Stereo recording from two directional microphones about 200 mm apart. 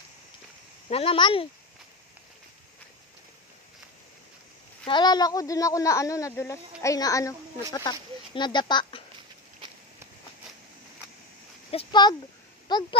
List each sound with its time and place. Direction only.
0.8 s speech: 30° left (ahead or behind)
4.8 s speech: 20° left (ahead or behind)
11.7 s speech: 25° left (ahead or behind)